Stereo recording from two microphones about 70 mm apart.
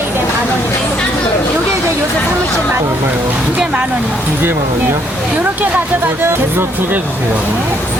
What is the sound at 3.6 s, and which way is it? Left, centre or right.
Speech, centre.